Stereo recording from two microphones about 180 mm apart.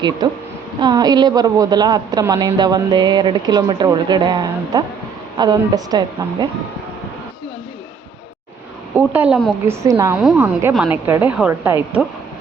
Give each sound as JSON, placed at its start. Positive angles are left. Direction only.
{"t": 0.2, "sound": "a woman's voice", "side_deg": -25}
{"t": 9.0, "sound": "a woman's voice", "side_deg": -10}
{"t": 9.8, "sound": "a woman's voice", "side_deg": -15}
{"t": 10.2, "sound": "a woman's voice", "side_deg": -5}